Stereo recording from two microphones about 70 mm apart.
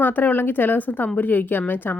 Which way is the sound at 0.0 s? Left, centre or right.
Left.